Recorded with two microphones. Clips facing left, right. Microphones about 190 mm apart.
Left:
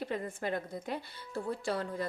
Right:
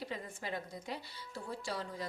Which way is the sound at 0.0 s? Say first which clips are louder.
Left 7 dB; 55° left (ahead or behind).